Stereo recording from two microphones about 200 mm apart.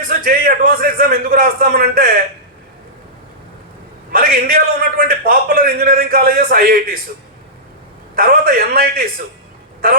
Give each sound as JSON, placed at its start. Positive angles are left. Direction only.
{"t": 0.1, "sound": "a man's voice", "side_deg": -45}
{"t": 4.1, "sound": "a man's voice", "side_deg": -50}
{"t": 8.1, "sound": "a man's voice", "side_deg": -50}